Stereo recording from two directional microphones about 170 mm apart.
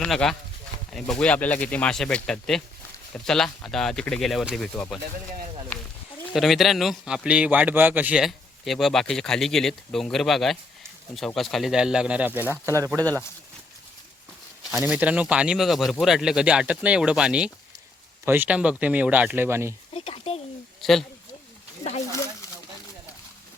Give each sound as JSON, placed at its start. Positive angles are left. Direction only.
{"t": 0.0, "sound": "a man's voice", "side_deg": 5}
{"t": 6.3, "sound": "a man's voice", "side_deg": 0}
{"t": 14.7, "sound": "a man's voice", "side_deg": -10}
{"t": 19.9, "sound": "a sound", "side_deg": 35}
{"t": 20.8, "sound": "a man's voice", "side_deg": 0}